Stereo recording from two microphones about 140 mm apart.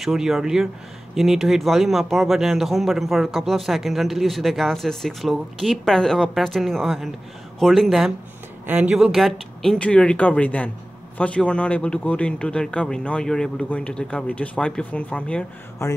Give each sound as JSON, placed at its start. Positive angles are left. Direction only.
{"t": 0.0, "sound": "a man's voice", "side_deg": 0}
{"t": 15.8, "sound": "speech", "side_deg": 20}